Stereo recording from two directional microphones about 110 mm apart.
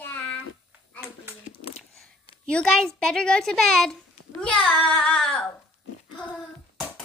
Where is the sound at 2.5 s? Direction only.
10° left (ahead or behind).